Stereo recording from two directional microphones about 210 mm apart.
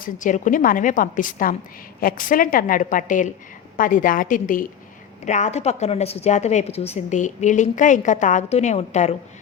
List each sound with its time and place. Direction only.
0.0 s a woman's voice: 35° left (ahead or behind)